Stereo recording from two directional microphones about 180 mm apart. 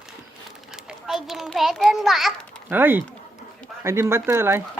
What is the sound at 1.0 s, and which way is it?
A child's voice, centre (ahead or behind).